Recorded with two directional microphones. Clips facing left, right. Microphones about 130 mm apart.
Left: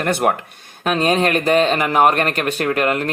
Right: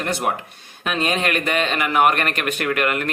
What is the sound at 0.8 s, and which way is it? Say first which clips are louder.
Speech: left 5 dB; 40° left (ahead or behind).